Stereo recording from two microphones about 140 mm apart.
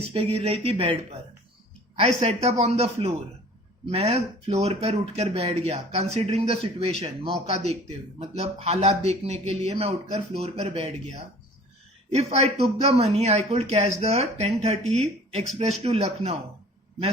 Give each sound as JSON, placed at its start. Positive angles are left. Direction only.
{"t": 0.1, "sound": "a man's voice", "side_deg": -45}
{"t": 2.0, "sound": "a man's voice", "side_deg": -50}
{"t": 12.1, "sound": "a man's voice", "side_deg": -50}